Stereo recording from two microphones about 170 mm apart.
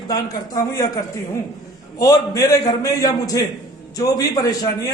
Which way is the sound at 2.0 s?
20° left (ahead or behind).